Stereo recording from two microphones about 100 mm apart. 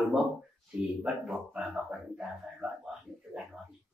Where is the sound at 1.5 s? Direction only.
5° right (ahead or behind).